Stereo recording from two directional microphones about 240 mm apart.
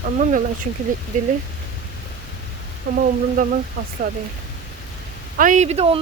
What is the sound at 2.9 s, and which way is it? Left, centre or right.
Speech, right.